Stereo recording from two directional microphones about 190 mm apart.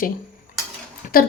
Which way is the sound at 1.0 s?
45° left (ahead or behind).